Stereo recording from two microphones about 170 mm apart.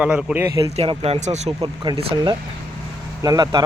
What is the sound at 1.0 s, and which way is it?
Speech, 40° right (ahead or behind).